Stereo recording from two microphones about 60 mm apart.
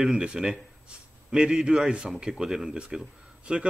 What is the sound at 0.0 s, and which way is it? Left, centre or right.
A man's voice, centre.